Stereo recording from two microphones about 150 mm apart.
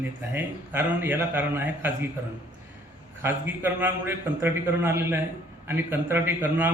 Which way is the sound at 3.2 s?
15° right (ahead or behind).